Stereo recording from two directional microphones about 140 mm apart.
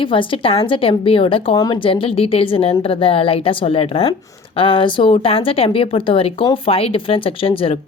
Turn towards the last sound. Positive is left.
turn(degrees=40)  # may be behind; listen again after turning